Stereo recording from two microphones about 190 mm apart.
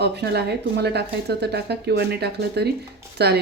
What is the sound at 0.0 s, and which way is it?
Speech, 60° right (ahead or behind).